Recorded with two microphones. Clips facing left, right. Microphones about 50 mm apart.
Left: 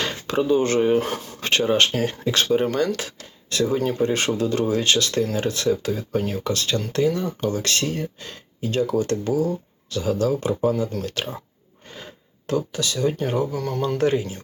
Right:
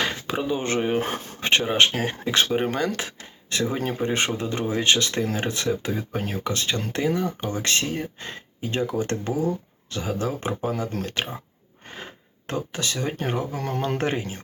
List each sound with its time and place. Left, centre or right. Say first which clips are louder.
0.0 s speech: left 3 dB; centre; by 14.4 s right